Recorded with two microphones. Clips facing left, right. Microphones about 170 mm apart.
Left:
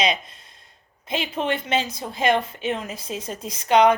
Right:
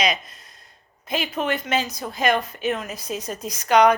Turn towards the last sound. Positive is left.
turn(degrees=25)  # may be behind; listen again after turning